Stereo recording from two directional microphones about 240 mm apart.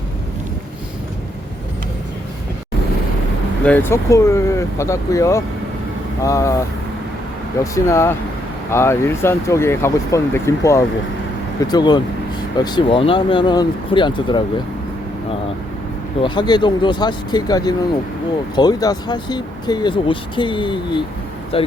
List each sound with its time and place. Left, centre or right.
3.6 s speech: centre
7.6 s speech: centre
16.2 s speech: centre